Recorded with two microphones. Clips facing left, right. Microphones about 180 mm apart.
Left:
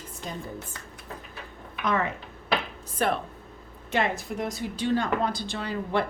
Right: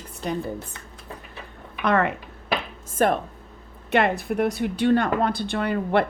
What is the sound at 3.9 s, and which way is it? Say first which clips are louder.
Speech: right 6 dB; 60° right (ahead or behind).